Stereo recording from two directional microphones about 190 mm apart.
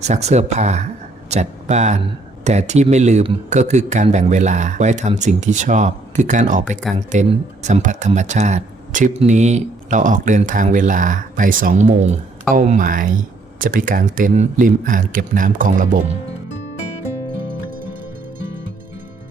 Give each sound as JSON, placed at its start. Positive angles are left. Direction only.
{"t": 0.0, "sound": "speech", "side_deg": -35}
{"t": 17.5, "sound": "music", "side_deg": -50}